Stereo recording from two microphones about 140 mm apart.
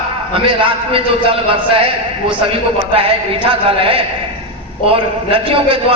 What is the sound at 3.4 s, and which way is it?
A man's voice, 40° right (ahead or behind).